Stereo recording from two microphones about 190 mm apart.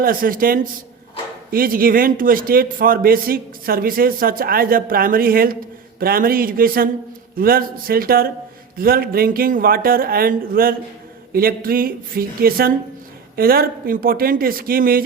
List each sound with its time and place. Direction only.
0.0 s a man's voice: 50° right (ahead or behind)